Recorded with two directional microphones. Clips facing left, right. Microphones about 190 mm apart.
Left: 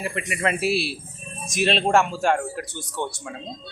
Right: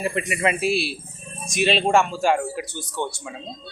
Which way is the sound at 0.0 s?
25° right (ahead or behind).